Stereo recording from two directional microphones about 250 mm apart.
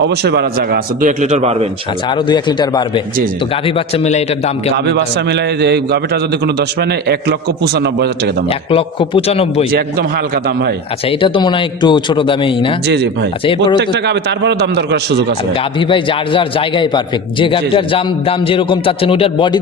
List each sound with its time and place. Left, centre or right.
0.0 s a man's voice: right
2.0 s a man's voice: centre
4.9 s a man's voice: right
8.4 s a man's voice: left
9.7 s a man's voice: right
11.2 s a man's voice: centre
13.7 s a man's voice: right
15.8 s a man's voice: centre